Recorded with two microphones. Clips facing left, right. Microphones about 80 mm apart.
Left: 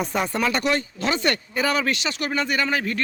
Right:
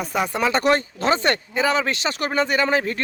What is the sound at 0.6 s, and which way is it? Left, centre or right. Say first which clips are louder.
Speech: right 4 dB; right.